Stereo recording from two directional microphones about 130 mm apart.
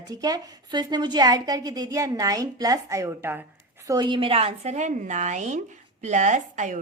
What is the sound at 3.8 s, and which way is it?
A woman's voice, 35° right (ahead or behind).